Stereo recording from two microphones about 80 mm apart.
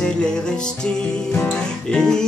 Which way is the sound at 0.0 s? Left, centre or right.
Centre.